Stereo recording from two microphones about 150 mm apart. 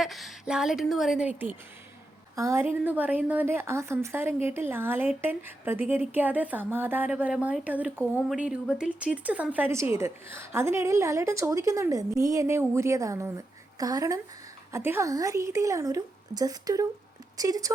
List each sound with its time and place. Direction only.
0.0 s a woman's voice: centre (ahead or behind)
2.3 s a woman's voice: 20° right (ahead or behind)